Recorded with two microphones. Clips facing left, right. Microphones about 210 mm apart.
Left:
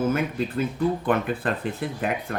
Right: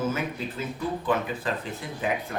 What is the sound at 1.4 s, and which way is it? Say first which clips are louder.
Speech: left 4 dB; 60° left (ahead or behind).